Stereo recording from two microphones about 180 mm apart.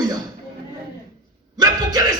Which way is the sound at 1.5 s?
20° right (ahead or behind).